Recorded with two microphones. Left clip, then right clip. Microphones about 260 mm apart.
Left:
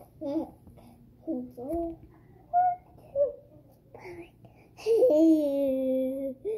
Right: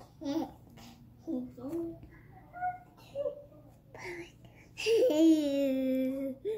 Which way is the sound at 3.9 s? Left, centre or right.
Centre.